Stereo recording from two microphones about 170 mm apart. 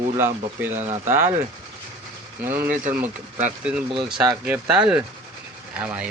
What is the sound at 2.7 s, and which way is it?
Speech, 50° right (ahead or behind).